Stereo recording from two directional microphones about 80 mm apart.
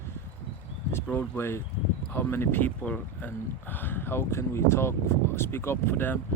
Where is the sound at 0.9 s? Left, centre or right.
Left.